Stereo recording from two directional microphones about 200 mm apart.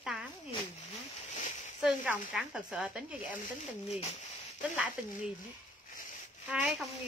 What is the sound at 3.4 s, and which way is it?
Speech, 30° left (ahead or behind).